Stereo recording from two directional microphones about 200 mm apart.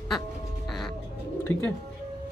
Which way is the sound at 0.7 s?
Centre (ahead or behind).